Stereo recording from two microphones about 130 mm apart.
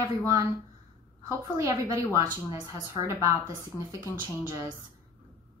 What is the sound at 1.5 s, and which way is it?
A woman's voice, 25° right (ahead or behind).